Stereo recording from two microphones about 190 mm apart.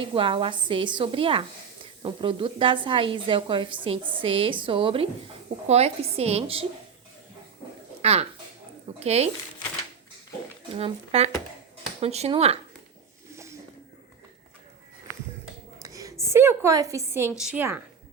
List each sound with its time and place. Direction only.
0.1 s a woman's voice: 25° right (ahead or behind)
8.0 s a woman's voice: 35° right (ahead or behind)
10.8 s a woman's voice: 30° right (ahead or behind)
13.3 s a sound: 15° right (ahead or behind)
15.8 s a sound: 15° right (ahead or behind)
16.2 s a woman's voice: 15° right (ahead or behind)